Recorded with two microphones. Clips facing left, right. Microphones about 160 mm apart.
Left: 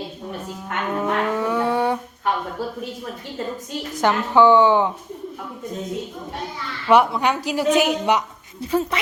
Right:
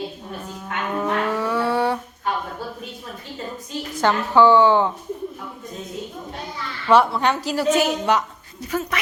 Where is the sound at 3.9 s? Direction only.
20° left (ahead or behind).